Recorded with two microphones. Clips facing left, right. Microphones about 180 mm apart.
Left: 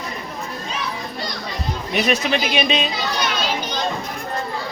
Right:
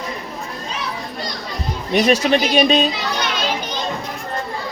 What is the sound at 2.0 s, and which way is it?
Speech, 35° right (ahead or behind).